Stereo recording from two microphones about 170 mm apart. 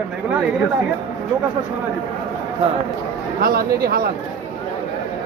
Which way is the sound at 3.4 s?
60° right (ahead or behind).